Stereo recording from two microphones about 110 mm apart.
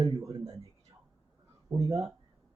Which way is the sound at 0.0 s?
35° right (ahead or behind).